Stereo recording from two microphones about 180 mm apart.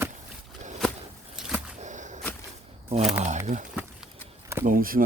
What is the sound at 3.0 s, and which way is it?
Speech, centre (ahead or behind).